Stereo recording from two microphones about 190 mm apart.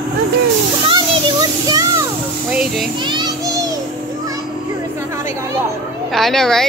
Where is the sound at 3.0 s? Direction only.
25° right (ahead or behind).